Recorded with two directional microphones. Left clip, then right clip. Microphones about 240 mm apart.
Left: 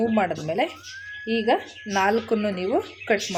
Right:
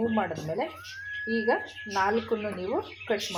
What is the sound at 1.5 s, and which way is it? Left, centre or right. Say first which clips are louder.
Speech: left 6 dB; left.